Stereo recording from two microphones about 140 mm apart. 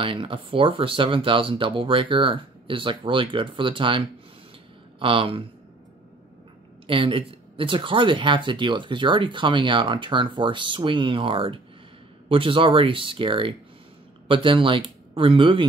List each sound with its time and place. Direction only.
0.0 s speech: 40° right (ahead or behind)
6.9 s speech: 40° right (ahead or behind)